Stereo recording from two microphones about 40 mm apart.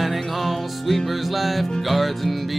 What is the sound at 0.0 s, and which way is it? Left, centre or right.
Music, centre.